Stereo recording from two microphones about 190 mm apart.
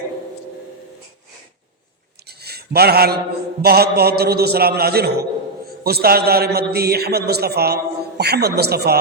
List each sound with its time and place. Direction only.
2.4 s mantra: 55° right (ahead or behind)
3.6 s a man's voice: 55° right (ahead or behind)